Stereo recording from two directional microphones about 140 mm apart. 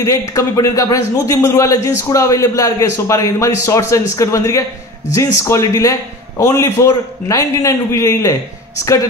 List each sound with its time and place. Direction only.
0.0 s a man's voice: 25° left (ahead or behind)